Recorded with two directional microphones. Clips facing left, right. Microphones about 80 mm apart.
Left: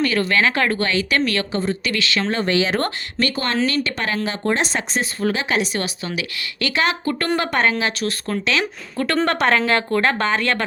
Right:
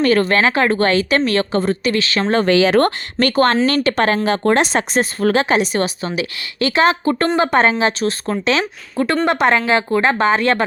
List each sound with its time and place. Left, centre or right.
0.0 s speech: right
0.8 s speech: right
2.4 s speech: right
3.2 s speech: right
4.4 s a woman's voice: right